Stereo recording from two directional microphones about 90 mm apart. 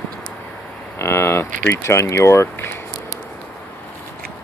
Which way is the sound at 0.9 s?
30° left (ahead or behind).